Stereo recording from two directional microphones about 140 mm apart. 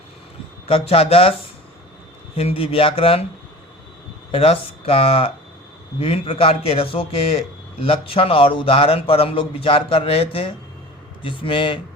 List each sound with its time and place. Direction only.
0.7 s speech: 45° left (ahead or behind)
2.3 s speech: 45° left (ahead or behind)
4.3 s speech: 45° left (ahead or behind)